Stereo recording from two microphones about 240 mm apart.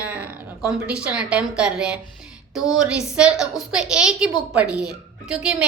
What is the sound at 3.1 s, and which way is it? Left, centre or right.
A woman's voice, centre.